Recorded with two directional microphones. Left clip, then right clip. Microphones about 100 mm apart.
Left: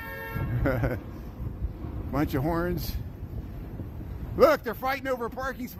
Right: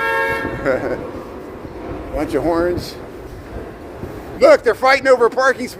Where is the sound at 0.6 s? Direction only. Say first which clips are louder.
Right 9 dB; 80° left.